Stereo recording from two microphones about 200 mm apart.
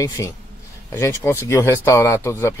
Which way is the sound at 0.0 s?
15° left (ahead or behind).